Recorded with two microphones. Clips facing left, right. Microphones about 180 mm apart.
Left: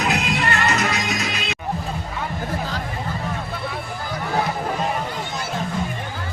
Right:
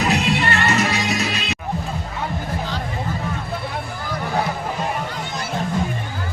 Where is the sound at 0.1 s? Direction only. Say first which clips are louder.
Right 2 dB; 35° right (ahead or behind).